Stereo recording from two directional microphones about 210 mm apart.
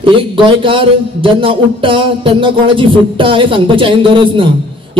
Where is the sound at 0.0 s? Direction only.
25° right (ahead or behind).